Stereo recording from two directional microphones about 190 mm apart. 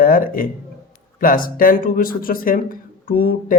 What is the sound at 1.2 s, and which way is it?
Speech, 45° left (ahead or behind).